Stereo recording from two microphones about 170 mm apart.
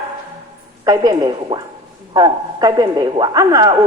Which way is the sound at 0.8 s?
20° right (ahead or behind).